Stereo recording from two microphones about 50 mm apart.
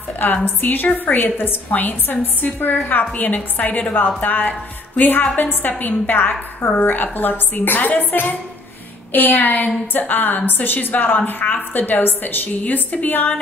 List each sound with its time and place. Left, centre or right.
0.6 s a woman's voice: left